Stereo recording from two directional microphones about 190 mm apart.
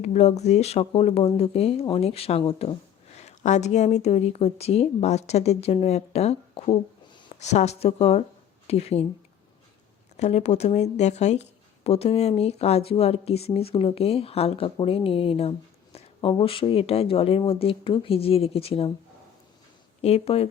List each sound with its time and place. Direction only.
0.0 s speech: 35° left (ahead or behind)
10.2 s speech: 35° left (ahead or behind)
20.0 s speech: 30° left (ahead or behind)